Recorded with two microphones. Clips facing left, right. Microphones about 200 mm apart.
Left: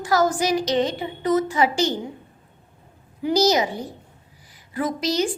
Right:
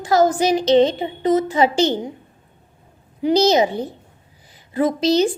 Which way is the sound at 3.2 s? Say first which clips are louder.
Right 4 dB; 25° right (ahead or behind).